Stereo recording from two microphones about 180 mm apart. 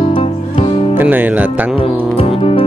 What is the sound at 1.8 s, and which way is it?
Music, 30° left (ahead or behind).